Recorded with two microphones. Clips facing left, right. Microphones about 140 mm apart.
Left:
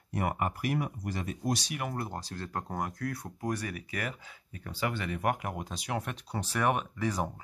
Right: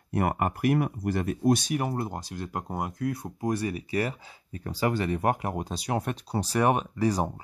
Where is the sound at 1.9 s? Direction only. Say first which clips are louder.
Right 4 dB; 20° right (ahead or behind).